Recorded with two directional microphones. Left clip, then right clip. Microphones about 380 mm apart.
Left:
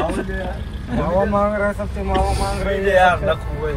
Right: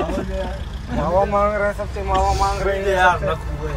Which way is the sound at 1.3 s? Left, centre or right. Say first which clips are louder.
Even; right.